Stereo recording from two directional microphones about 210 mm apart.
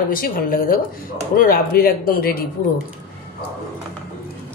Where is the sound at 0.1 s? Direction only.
45° left (ahead or behind).